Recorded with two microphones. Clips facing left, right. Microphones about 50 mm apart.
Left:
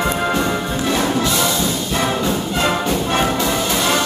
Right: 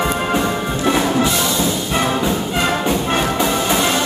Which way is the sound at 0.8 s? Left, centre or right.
Centre.